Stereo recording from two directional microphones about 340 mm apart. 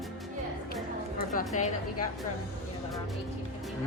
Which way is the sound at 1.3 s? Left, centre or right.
Left.